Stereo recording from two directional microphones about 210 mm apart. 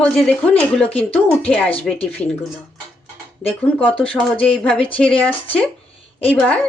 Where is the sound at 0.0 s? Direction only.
5° left (ahead or behind).